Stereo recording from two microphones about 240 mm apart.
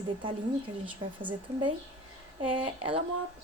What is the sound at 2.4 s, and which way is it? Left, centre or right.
Speech, right.